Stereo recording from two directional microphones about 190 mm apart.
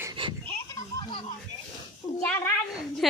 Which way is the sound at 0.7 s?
25° left (ahead or behind).